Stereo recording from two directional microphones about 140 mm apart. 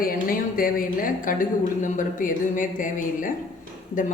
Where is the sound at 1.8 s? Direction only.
70° left (ahead or behind).